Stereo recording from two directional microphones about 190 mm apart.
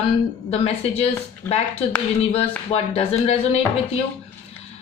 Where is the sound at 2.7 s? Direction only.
35° left (ahead or behind).